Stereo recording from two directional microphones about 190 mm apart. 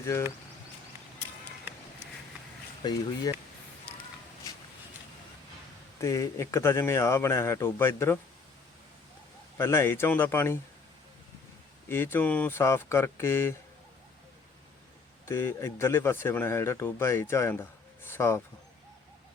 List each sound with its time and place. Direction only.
0.0 s speech: 15° left (ahead or behind)
2.8 s speech: 20° left (ahead or behind)
6.0 s speech: 15° left (ahead or behind)
9.6 s speech: 15° left (ahead or behind)
11.9 s speech: 10° left (ahead or behind)
15.3 s speech: 15° left (ahead or behind)